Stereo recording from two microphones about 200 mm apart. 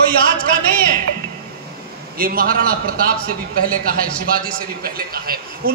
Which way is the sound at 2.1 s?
45° right (ahead or behind).